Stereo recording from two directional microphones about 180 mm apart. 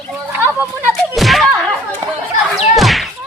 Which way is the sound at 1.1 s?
Centre (ahead or behind).